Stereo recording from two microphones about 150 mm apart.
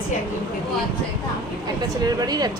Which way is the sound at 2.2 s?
25° right (ahead or behind).